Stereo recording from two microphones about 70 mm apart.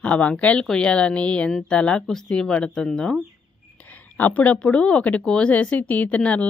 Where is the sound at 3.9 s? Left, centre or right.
Left.